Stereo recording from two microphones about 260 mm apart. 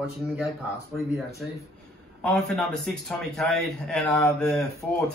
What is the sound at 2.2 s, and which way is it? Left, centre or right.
A man's voice, centre.